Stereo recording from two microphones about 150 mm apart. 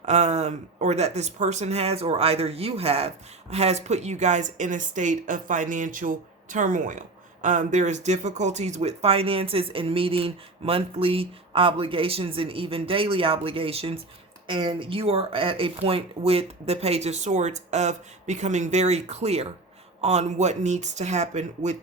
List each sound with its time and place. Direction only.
0.0 s speech: 50° right (ahead or behind)